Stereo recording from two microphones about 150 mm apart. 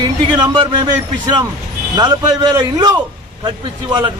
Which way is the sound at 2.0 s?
30° right (ahead or behind).